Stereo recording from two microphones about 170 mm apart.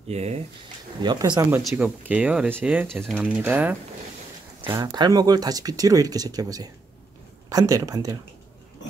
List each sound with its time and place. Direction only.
0.1 s speech: 40° right (ahead or behind)
1.0 s speech: 25° right (ahead or behind)
1.6 s speech: 5° right (ahead or behind); by 8.2 s 20° right (ahead or behind)